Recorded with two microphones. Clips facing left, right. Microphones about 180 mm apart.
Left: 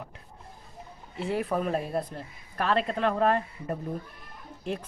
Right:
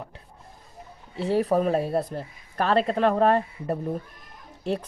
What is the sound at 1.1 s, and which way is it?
Speech, 35° right (ahead or behind).